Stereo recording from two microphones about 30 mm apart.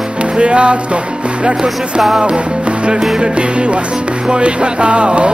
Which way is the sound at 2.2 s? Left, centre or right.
Right.